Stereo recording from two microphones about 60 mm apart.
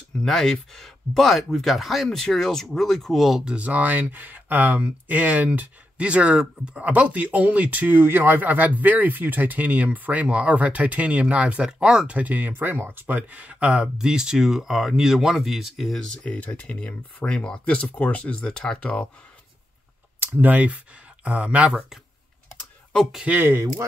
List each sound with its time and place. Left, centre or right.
0.2 s speech: centre
3.4 s speech: right
12.2 s speech: right
13.0 s speech: right; by 16.0 s centre
16.3 s speech: left
20.3 s speech: right